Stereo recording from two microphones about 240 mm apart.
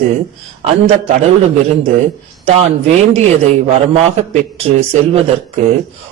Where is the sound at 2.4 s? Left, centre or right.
Right.